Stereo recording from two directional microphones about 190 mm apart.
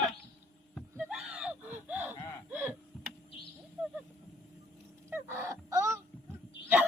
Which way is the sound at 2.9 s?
Centre (ahead or behind).